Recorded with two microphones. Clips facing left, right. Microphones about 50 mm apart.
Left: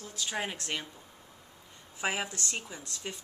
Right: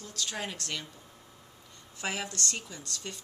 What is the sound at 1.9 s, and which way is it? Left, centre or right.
Speech, centre.